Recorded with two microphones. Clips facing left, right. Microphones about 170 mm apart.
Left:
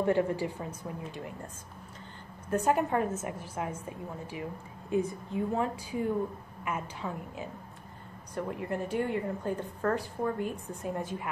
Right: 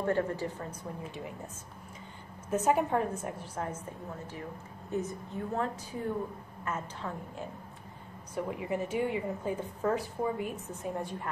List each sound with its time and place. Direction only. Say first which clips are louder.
0.0 s a woman's voice: left 3 dB; 15° left (ahead or behind)
0.8 s a woman's voice: left 1 dB; centre (ahead or behind)
2.5 s a woman's voice: even; centre (ahead or behind)
4.9 s a woman's voice: left 5 dB; 15° left (ahead or behind)
8.4 s a woman's voice: even; 5° right (ahead or behind)